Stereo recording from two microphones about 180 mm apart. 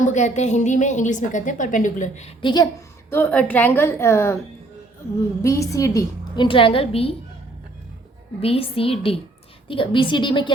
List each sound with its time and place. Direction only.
0.0 s a woman's voice: 40° left (ahead or behind)
2.4 s a woman's voice: 25° left (ahead or behind)
3.1 s a woman's voice: 10° left (ahead or behind)
5.4 s a woman's voice: 15° left (ahead or behind)
8.4 s a woman's voice: 30° left (ahead or behind)